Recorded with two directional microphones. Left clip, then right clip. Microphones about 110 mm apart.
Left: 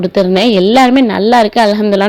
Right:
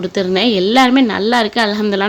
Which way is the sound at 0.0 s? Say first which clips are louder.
Left 5 dB; 40° left (ahead or behind).